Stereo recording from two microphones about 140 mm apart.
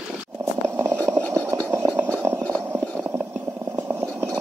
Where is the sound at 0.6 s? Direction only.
15° right (ahead or behind).